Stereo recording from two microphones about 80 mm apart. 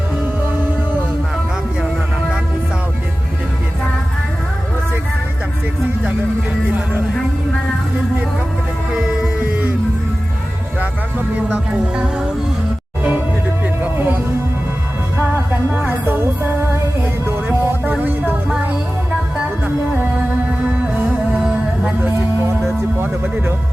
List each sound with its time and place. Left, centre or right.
9.0 s music: centre
9.4 s music: centre
13.0 s music: centre
15.7 s music: right
21.3 s music: centre
23.0 s music: right